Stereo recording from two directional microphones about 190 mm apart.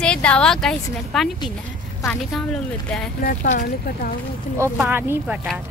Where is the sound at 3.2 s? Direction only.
45° left (ahead or behind).